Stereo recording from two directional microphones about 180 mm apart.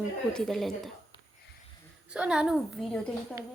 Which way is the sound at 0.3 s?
Centre (ahead or behind).